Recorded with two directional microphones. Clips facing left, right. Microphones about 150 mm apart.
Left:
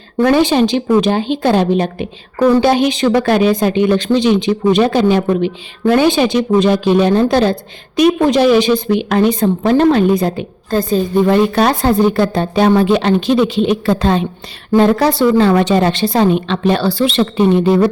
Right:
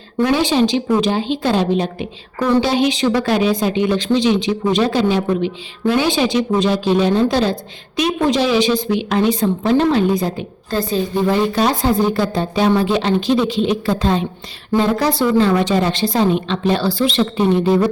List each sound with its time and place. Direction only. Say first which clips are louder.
0.2 s a woman's voice: left 4 dB; 50° left (ahead or behind)
10.7 s a woman's voice: left 4 dB; 50° left (ahead or behind); by 17.7 s 70° left (ahead or behind)